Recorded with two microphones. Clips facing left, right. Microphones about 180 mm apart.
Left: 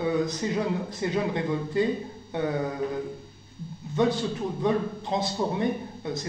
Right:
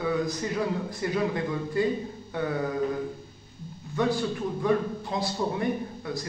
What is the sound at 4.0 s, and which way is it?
A man's voice, 20° left (ahead or behind).